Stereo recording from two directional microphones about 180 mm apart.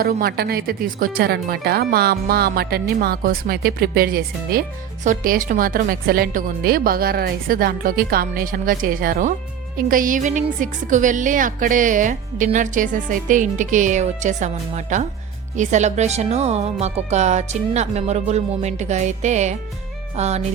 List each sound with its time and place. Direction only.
0.0 s speech: 55° right (ahead or behind); by 20.4 s 40° right (ahead or behind)